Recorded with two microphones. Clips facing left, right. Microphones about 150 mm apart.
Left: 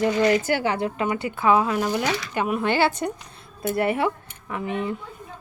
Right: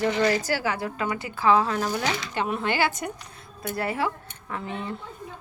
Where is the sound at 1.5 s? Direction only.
15° left (ahead or behind).